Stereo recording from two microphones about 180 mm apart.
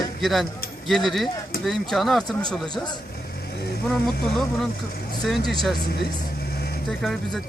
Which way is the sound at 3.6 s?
60° left (ahead or behind).